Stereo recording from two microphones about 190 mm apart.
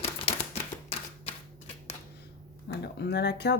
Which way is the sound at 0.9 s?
30° left (ahead or behind).